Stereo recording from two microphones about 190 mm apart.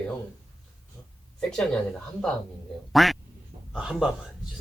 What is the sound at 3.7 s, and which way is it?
Speech, 5° right (ahead or behind).